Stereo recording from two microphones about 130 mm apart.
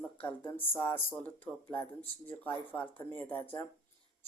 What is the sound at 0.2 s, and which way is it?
Speech, 15° left (ahead or behind).